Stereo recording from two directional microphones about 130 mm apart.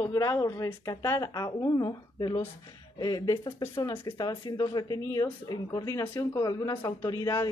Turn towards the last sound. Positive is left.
turn(degrees=25)  # may be behind; listen again after turning